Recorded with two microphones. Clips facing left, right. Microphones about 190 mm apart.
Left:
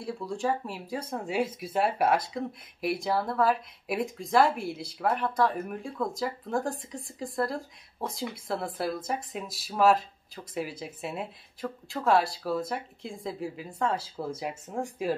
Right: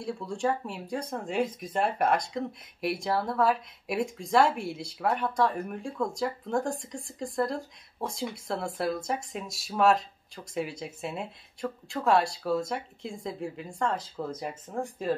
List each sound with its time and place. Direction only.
0.0 s speech: centre (ahead or behind)